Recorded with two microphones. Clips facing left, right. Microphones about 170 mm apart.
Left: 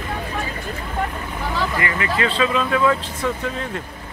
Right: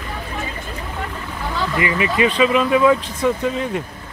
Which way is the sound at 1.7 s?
20° right (ahead or behind).